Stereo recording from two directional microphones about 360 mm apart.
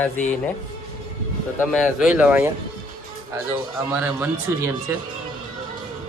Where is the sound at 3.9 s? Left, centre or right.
Centre.